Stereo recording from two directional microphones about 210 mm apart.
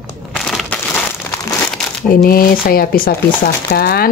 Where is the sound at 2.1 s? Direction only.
45° left (ahead or behind).